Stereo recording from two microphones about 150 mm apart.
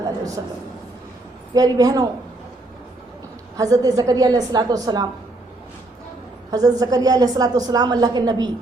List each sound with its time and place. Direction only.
1.5 s a woman's voice: 25° right (ahead or behind)
3.6 s a woman's voice: 25° right (ahead or behind)
6.5 s a woman's voice: 25° right (ahead or behind)